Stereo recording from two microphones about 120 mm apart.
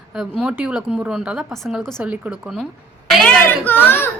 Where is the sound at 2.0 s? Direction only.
10° right (ahead or behind).